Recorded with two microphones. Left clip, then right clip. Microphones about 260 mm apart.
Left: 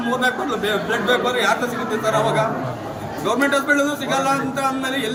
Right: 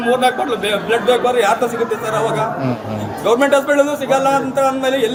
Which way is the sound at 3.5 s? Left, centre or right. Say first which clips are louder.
Right 5 dB; left.